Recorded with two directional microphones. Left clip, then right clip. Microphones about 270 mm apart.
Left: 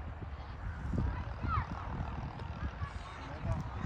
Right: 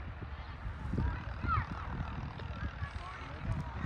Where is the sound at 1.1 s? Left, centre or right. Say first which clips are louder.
Right 3 dB; left.